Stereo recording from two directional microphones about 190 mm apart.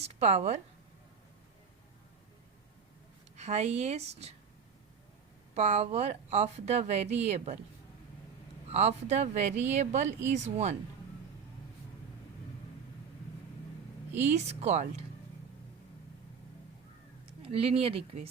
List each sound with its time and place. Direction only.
0.0 s speech: 35° right (ahead or behind)
3.3 s speech: 35° right (ahead or behind)
5.5 s speech: 35° right (ahead or behind)
8.7 s speech: 35° right (ahead or behind)
14.2 s speech: 35° right (ahead or behind)
17.4 s speech: 30° right (ahead or behind)